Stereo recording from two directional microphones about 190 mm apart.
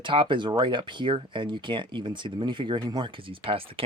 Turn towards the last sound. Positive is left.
turn(degrees=-30)  # may be behind; listen again after turning